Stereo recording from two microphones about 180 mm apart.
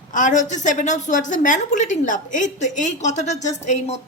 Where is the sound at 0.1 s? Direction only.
45° left (ahead or behind).